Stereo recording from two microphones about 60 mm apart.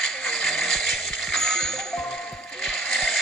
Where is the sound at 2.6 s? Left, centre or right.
Centre.